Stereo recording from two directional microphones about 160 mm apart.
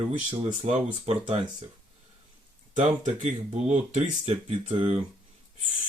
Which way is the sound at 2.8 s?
45° right (ahead or behind).